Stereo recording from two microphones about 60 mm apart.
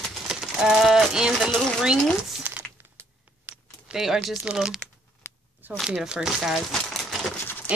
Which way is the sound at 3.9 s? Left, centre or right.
Centre.